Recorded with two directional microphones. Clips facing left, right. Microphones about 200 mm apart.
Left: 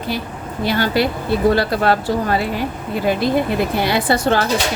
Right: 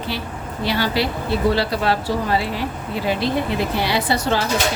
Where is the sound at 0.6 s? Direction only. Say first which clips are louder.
Left 3 dB; 50° left (ahead or behind).